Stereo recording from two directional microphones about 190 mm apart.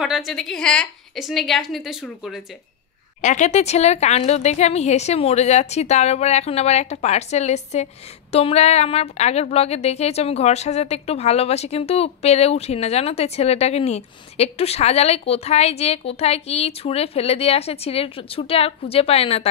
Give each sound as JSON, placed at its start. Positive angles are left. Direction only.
{"t": 0.0, "sound": "a woman's voice", "side_deg": 0}
{"t": 3.2, "sound": "a woman's voice", "side_deg": 40}